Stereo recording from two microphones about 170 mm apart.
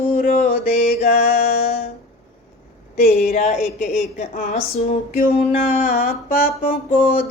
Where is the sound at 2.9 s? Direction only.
55° left (ahead or behind).